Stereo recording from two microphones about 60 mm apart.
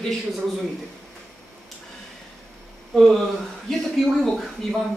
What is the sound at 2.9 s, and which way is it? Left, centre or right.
A man's voice, centre.